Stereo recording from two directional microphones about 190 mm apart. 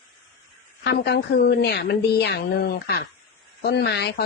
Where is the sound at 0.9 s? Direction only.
60° left (ahead or behind).